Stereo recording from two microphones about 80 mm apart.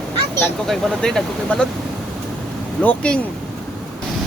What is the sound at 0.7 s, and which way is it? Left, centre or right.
Speech, centre.